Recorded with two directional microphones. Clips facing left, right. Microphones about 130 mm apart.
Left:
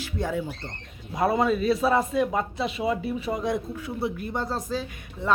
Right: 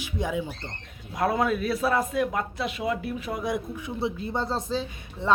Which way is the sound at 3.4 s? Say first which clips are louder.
Left 2 dB; 15° right (ahead or behind).